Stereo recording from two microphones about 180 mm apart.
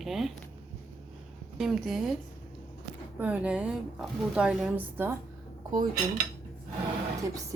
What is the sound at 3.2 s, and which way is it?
Speech, 5° right (ahead or behind).